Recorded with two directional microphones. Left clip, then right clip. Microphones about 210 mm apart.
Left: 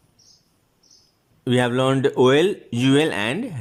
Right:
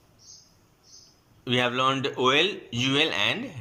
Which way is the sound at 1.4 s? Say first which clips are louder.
Left 4 dB; 35° left (ahead or behind).